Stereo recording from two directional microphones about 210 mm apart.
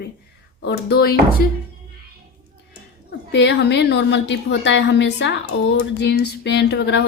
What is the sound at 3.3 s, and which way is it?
A woman's voice, 55° left (ahead or behind).